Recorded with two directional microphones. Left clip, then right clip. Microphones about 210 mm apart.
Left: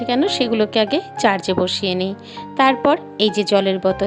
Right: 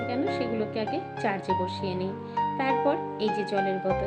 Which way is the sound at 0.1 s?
50° left (ahead or behind).